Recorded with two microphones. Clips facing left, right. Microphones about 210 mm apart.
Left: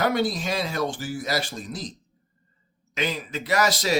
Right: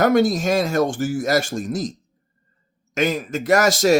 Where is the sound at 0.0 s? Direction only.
45° right (ahead or behind).